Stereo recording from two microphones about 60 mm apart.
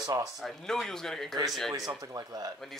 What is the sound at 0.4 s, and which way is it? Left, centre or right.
Speech, centre.